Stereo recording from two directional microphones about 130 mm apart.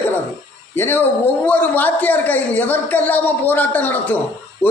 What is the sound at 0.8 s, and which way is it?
A woman's voice, 15° left (ahead or behind).